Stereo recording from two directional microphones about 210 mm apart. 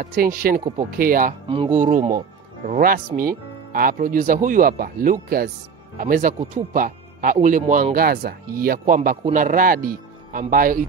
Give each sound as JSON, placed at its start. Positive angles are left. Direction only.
{"t": 0.0, "sound": "speech", "side_deg": -40}
{"t": 1.5, "sound": "speech", "side_deg": -25}
{"t": 1.8, "sound": "speech", "side_deg": -35}